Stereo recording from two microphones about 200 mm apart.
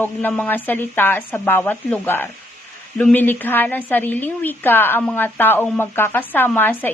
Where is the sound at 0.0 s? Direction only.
10° left (ahead or behind).